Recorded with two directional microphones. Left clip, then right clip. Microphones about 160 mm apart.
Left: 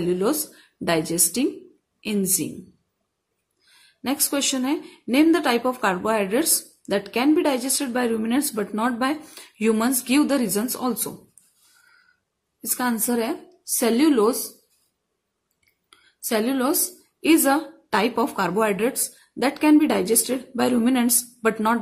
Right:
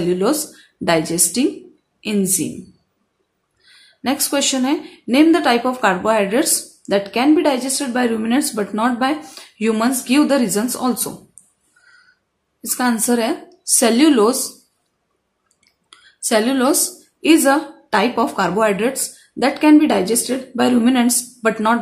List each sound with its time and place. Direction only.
0.1 s a woman's voice: 20° left (ahead or behind)
3.6 s speech: 15° left (ahead or behind)
12.6 s a woman's voice: 15° left (ahead or behind)
15.9 s a sound: 15° left (ahead or behind)
17.2 s speech: 20° left (ahead or behind)